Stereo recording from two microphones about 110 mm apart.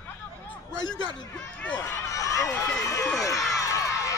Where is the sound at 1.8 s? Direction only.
30° left (ahead or behind).